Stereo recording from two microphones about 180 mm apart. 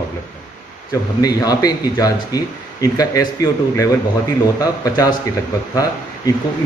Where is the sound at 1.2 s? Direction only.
20° left (ahead or behind).